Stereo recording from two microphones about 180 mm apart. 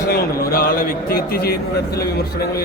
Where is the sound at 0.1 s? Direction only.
60° left (ahead or behind).